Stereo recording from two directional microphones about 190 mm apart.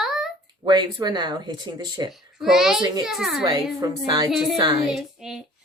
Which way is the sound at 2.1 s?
Centre (ahead or behind).